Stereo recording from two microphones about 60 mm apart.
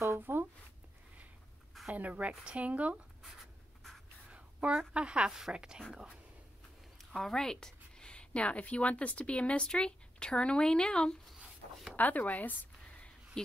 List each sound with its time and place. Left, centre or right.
0.2 s a sound: right
2.0 s speech: right
3.2 s writing: centre
4.3 s a woman's voice: right
7.2 s speech: centre
12.0 s a sound: left